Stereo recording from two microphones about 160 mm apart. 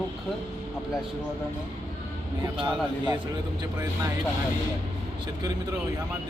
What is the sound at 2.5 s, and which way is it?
Speech, 30° right (ahead or behind).